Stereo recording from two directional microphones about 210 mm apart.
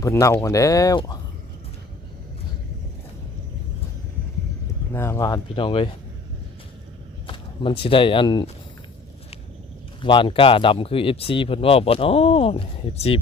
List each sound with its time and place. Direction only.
0.0 s speech: 15° left (ahead or behind)
4.9 s speech: 15° left (ahead or behind)
7.3 s speech: 25° left (ahead or behind)
10.0 s speech: 25° left (ahead or behind)